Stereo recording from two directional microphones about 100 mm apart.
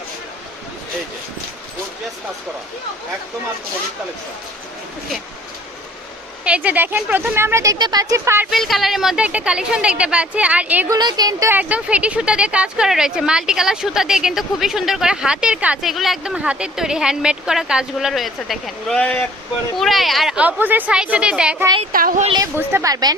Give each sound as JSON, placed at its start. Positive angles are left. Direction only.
{"t": 6.4, "sound": "speech", "side_deg": -10}
{"t": 7.8, "sound": "speech", "side_deg": -45}
{"t": 8.1, "sound": "speech", "side_deg": -30}
{"t": 8.4, "sound": "speech", "side_deg": 0}
{"t": 10.8, "sound": "a woman's voice", "side_deg": -40}
{"t": 11.4, "sound": "speech", "side_deg": -15}
{"t": 18.9, "sound": "speech", "side_deg": 15}
{"t": 19.7, "sound": "speech", "side_deg": 0}
{"t": 20.3, "sound": "speech", "side_deg": -15}
{"t": 22.5, "sound": "speech", "side_deg": -25}
{"t": 22.9, "sound": "a woman's voice", "side_deg": -40}